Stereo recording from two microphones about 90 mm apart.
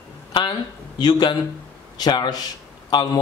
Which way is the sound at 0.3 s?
55° left (ahead or behind).